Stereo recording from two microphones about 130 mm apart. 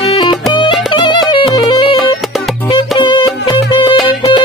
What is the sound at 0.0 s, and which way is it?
Music, 40° left (ahead or behind).